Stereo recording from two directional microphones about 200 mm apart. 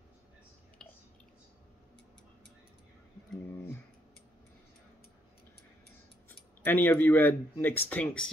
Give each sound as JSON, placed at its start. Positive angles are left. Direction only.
{"t": 6.2, "sound": "speech", "side_deg": 10}